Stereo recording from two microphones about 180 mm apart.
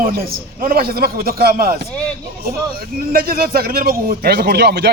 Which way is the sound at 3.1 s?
55° right (ahead or behind).